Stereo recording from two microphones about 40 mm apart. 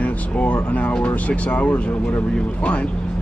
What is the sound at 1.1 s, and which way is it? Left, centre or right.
Speech, left.